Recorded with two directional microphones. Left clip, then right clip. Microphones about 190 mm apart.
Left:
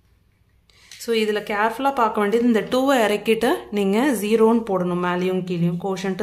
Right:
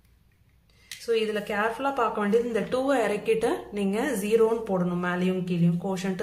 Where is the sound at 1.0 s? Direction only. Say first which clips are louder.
Left 5 dB; 35° left (ahead or behind).